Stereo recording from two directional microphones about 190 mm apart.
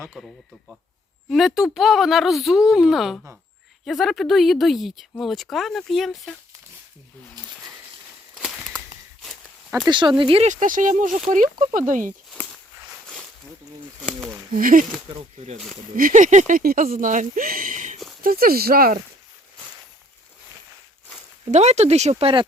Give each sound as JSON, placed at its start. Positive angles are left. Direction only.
{"t": 0.1, "sound": "speech", "side_deg": 0}
{"t": 7.4, "sound": "a sound", "side_deg": -20}
{"t": 8.4, "sound": "a sound", "side_deg": 0}
{"t": 9.8, "sound": "speech", "side_deg": -25}
{"t": 14.0, "sound": "speech", "side_deg": 5}
{"t": 14.5, "sound": "speech", "side_deg": -45}
{"t": 16.0, "sound": "speech", "side_deg": -45}
{"t": 18.2, "sound": "speech", "side_deg": -50}
{"t": 21.5, "sound": "speech", "side_deg": -35}